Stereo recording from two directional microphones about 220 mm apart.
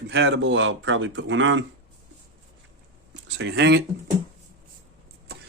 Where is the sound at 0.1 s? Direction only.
55° right (ahead or behind).